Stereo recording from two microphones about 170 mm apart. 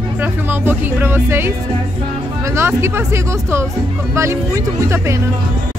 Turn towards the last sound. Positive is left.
turn(degrees=-15)  # may be behind; listen again after turning